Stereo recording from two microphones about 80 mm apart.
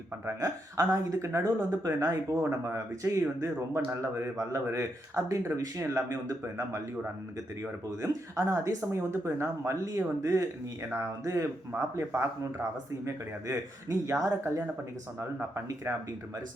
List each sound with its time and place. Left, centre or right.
0.3 s speech: right
7.9 s speech: right